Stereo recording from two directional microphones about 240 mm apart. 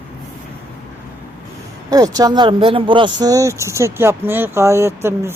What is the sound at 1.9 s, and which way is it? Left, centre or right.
Speech, centre.